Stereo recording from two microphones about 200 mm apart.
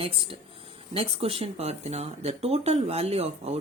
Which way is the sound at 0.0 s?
30° right (ahead or behind).